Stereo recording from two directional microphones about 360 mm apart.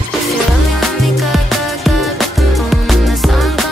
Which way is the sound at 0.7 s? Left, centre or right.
Centre.